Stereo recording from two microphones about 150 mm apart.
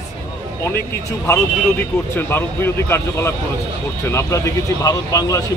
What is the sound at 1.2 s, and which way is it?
A man's voice, 15° left (ahead or behind).